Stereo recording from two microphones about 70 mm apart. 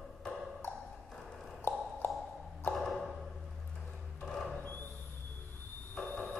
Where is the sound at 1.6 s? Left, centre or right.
Left.